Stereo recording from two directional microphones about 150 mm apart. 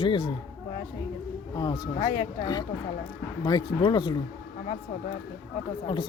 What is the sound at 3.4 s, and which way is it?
Speech, 30° left (ahead or behind).